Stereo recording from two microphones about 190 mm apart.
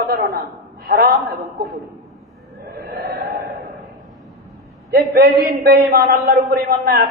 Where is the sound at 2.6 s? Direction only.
55° right (ahead or behind).